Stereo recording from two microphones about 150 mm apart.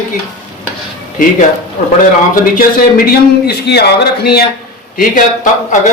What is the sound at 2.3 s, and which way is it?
A man's voice, 70° left (ahead or behind).